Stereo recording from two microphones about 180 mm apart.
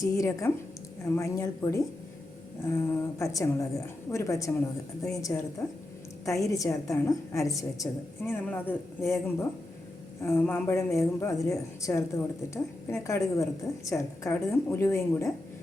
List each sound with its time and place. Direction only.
0.0 s a woman's voice: 20° left (ahead or behind)
10.2 s a woman's voice: 10° left (ahead or behind)